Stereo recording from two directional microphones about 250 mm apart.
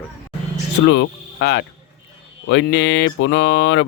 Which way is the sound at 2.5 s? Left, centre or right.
Left.